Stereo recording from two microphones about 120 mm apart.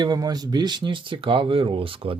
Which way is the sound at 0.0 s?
35° right (ahead or behind).